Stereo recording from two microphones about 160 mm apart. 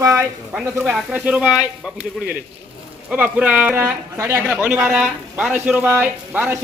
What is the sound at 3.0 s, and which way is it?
Speech, 10° right (ahead or behind).